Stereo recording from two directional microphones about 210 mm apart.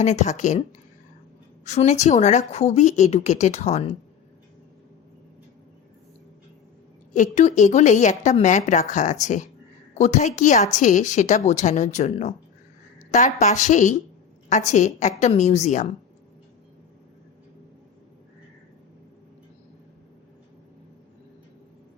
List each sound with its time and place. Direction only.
0.0 s a woman's voice: 35° left (ahead or behind)
1.6 s a woman's voice: 35° left (ahead or behind)
7.1 s a woman's voice: 35° left (ahead or behind)